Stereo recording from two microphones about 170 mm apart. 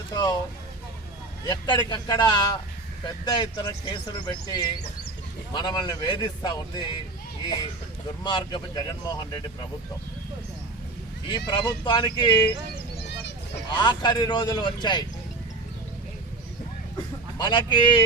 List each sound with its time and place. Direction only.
0.1 s speech: 20° left (ahead or behind)
1.5 s speech: 25° left (ahead or behind)
8.2 s speech: 25° left (ahead or behind)
11.3 s speech: 25° left (ahead or behind)
12.7 s a sound: 75° left (ahead or behind)
13.7 s speech: 25° left (ahead or behind)
17.3 s speech: 25° left (ahead or behind)